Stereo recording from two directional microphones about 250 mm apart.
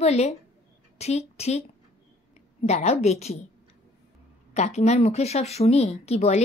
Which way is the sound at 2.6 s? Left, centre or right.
Left.